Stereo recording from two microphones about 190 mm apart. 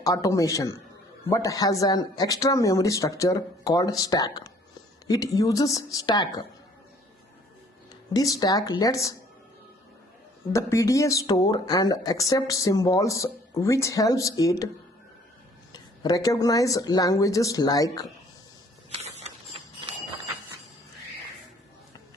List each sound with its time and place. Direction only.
0.0 s speech: 15° left (ahead or behind)
8.1 s speech: 20° left (ahead or behind)
10.5 s speech: 15° left (ahead or behind)
15.7 s speech: 20° left (ahead or behind)